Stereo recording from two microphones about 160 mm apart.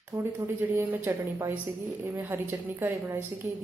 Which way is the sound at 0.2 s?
15° right (ahead or behind).